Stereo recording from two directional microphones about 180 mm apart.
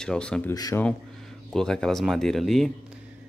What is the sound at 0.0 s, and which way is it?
Speech, 5° left (ahead or behind).